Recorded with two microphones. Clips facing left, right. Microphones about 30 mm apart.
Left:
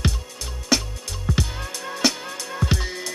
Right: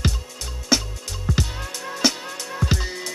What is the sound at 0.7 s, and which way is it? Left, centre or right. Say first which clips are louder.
Music: even; centre.